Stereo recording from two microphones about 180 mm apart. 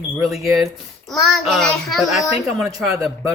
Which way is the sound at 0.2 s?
Centre (ahead or behind).